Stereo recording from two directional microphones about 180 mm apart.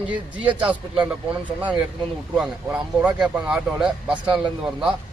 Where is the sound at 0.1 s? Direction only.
5° right (ahead or behind).